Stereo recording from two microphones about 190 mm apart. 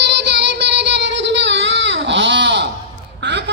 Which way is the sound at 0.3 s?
65° right (ahead or behind).